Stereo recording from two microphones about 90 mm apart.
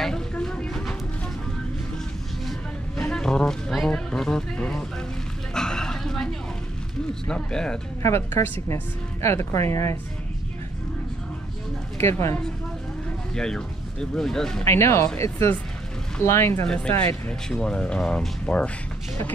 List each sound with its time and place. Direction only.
0.0 s a sound: 5° left (ahead or behind)
3.0 s a sound: 10° left (ahead or behind)
7.2 s speech: 10° left (ahead or behind)
8.0 s speech: 30° left (ahead or behind)
12.0 s speech: 30° left (ahead or behind)
13.3 s speech: 10° left (ahead or behind)
14.6 s speech: 30° left (ahead or behind)
16.6 s speech: 10° left (ahead or behind)